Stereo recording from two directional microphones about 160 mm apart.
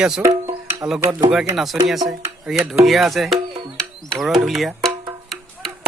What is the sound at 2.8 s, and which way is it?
Music, centre (ahead or behind).